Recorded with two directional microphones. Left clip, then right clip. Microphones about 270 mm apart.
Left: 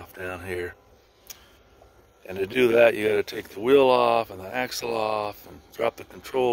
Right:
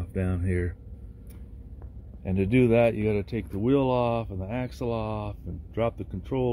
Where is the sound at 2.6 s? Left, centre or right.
Left.